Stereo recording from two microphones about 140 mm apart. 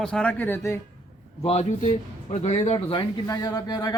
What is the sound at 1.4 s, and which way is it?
Speech, 50° left (ahead or behind).